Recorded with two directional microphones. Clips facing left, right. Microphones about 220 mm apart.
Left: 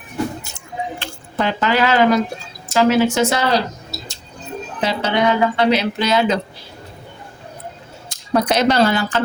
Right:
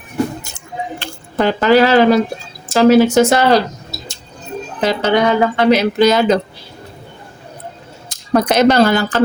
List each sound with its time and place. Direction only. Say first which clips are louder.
0.9 s speech: right 8 dB; 40° right (ahead or behind)
4.8 s speech: right 4 dB; 50° right (ahead or behind)
8.3 s speech: right 4 dB; 50° right (ahead or behind)